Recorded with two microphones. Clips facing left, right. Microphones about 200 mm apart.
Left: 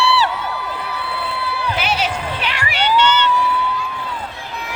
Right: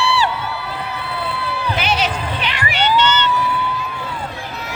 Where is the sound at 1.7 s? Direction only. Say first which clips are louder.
Right 1 dB; 5° left (ahead or behind).